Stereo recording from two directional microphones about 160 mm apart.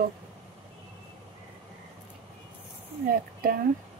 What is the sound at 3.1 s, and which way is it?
Speech, 65° right (ahead or behind).